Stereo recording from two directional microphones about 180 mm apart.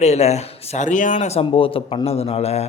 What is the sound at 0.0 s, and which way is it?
Speech, 35° left (ahead or behind).